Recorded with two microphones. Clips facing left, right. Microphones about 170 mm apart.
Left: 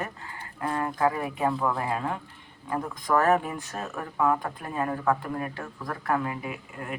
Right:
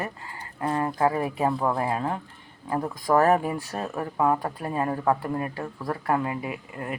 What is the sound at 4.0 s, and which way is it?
Speech, 20° right (ahead or behind).